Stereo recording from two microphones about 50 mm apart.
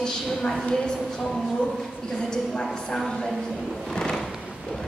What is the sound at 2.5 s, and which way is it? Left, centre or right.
A woman's voice, centre.